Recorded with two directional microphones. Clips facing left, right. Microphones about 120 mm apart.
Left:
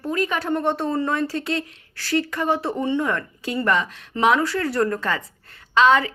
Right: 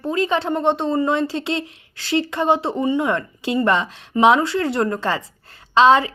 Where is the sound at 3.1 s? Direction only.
25° right (ahead or behind).